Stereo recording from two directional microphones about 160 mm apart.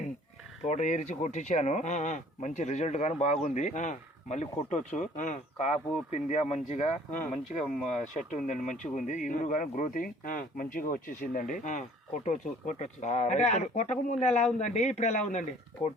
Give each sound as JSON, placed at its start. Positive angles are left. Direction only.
{"t": 0.6, "sound": "speech", "side_deg": 45}